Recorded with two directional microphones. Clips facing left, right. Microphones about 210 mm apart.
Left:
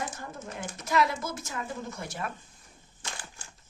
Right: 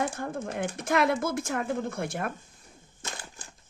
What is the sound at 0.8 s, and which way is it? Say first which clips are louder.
Speech: right 2 dB; 55° right (ahead or behind).